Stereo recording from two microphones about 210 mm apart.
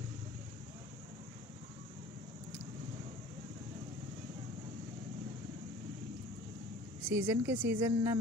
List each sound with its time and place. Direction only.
7.1 s speech: 10° right (ahead or behind)